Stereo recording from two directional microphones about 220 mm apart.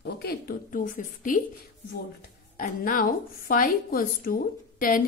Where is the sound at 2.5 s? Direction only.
40° left (ahead or behind).